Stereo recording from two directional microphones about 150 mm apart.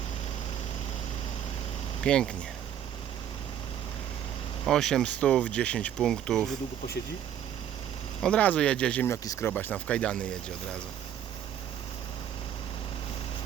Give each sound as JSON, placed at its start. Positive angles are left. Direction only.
{"t": 2.0, "sound": "speech", "side_deg": 5}
{"t": 4.6, "sound": "speech", "side_deg": 5}
{"t": 8.2, "sound": "speech", "side_deg": 5}
{"t": 9.2, "sound": "speech", "side_deg": 25}
{"t": 9.5, "sound": "speech", "side_deg": 10}